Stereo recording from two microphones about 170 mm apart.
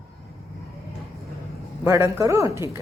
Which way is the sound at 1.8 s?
20° right (ahead or behind).